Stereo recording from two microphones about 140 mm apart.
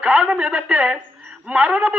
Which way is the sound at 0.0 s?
10° right (ahead or behind).